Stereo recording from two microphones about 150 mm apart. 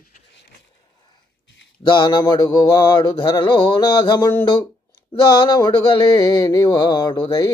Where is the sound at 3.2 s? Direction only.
30° left (ahead or behind).